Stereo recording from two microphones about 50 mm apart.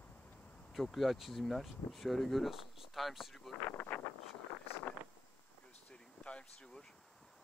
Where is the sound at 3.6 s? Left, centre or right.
Left.